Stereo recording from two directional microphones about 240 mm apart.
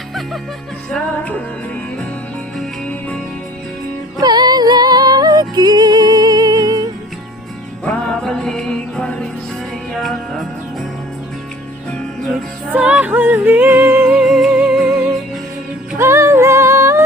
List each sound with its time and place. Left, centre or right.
0.9 s music: centre
2.6 s music: centre
4.2 s music: centre
7.9 s music: centre
11.9 s music: centre